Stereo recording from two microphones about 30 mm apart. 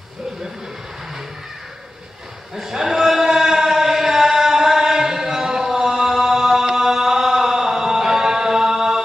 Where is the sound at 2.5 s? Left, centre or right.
Centre.